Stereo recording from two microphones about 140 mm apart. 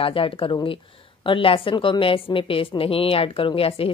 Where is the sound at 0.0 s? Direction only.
40° left (ahead or behind).